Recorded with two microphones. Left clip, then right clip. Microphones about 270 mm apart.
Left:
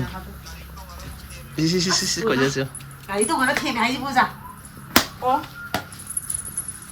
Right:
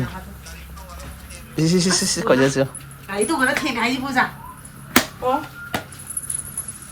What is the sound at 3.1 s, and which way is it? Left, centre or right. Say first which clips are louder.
Speech: right 1 dB; left.